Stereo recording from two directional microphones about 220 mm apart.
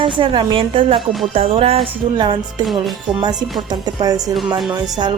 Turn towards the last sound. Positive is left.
turn(degrees=-20)  # may be behind; listen again after turning